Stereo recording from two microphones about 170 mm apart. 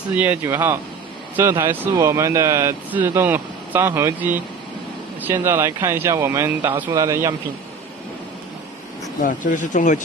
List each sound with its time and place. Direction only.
0.1 s speech: 10° right (ahead or behind)
9.2 s speech: 50° left (ahead or behind)